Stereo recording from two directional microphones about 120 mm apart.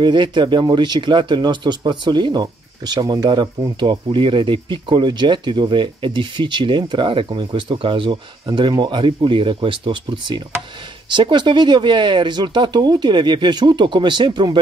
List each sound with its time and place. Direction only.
0.0 s speech: 40° right (ahead or behind)